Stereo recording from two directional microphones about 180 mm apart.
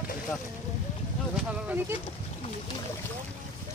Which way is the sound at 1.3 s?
10° right (ahead or behind).